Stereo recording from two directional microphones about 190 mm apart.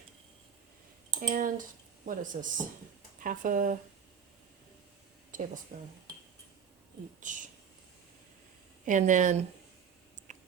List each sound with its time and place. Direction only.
1.3 s speech: 45° right (ahead or behind)
5.3 s speech: 45° right (ahead or behind)
7.2 s speech: 40° right (ahead or behind)
8.9 s speech: 40° right (ahead or behind)
10.3 s tick-tock: 40° right (ahead or behind)